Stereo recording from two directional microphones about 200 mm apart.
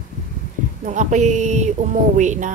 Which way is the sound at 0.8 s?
35° right (ahead or behind).